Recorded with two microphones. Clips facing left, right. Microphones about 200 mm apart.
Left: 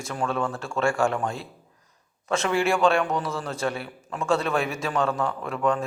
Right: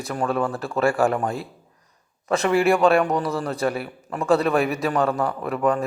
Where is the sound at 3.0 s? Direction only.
35° right (ahead or behind).